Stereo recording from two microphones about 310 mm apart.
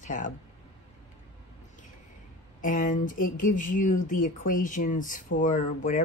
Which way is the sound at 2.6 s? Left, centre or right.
Left.